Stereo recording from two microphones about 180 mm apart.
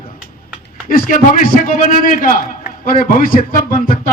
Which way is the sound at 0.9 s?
50° left (ahead or behind).